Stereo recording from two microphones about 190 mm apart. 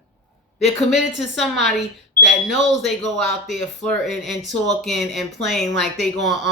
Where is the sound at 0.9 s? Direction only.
Centre (ahead or behind).